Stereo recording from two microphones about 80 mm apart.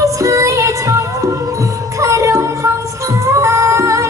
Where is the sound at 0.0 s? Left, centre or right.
Right.